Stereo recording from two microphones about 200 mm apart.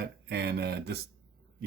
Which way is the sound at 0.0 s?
55° right (ahead or behind).